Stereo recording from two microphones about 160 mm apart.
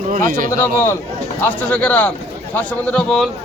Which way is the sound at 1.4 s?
10° left (ahead or behind).